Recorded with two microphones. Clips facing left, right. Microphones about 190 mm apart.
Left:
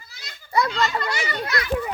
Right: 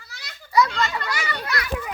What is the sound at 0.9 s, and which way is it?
Children playing, 25° left (ahead or behind).